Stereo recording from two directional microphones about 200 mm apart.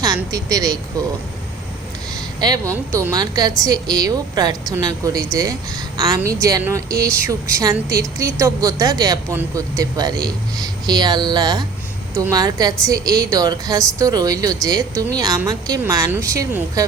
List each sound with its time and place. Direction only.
0.0 s a woman's voice: 20° right (ahead or behind)
2.4 s a woman's voice: 20° right (ahead or behind)